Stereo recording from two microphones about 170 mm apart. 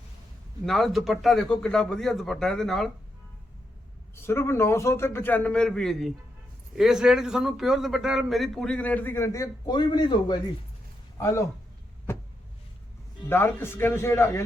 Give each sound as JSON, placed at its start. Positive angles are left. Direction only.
{"t": 0.6, "sound": "a man's voice", "side_deg": 0}
{"t": 4.1, "sound": "a man's voice", "side_deg": 15}
{"t": 13.2, "sound": "a man's voice", "side_deg": 15}